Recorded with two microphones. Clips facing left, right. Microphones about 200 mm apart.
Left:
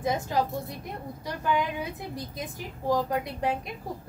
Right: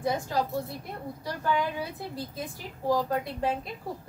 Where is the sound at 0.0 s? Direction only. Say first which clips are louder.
Left 1 dB; 20° left (ahead or behind).